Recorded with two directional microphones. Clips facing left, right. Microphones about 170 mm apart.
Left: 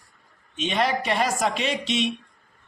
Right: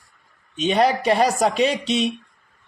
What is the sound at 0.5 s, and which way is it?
Speech, 40° right (ahead or behind).